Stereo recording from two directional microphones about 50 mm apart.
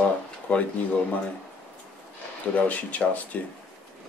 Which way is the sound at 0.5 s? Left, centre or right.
Left.